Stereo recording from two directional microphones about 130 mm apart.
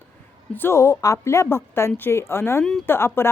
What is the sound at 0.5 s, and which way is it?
A woman's voice, 20° left (ahead or behind).